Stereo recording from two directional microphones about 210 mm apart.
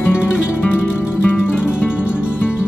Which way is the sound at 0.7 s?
10° left (ahead or behind).